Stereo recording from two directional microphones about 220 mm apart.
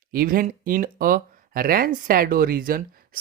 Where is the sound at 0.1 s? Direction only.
40° right (ahead or behind).